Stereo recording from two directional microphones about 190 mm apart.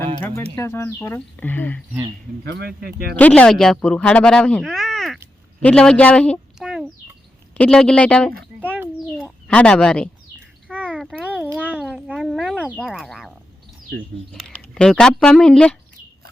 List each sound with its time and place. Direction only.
0.5 s speech: 15° left (ahead or behind)
2.4 s speech: 60° right (ahead or behind)
3.2 s a woman's voice: 5° left (ahead or behind)
8.6 s a sound: 10° right (ahead or behind)
9.1 s bird: 5° left (ahead or behind)
10.7 s a sound: 10° right (ahead or behind)
14.3 s speech: 5° left (ahead or behind)